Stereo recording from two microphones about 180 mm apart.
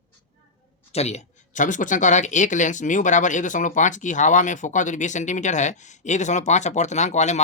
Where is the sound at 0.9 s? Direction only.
35° left (ahead or behind).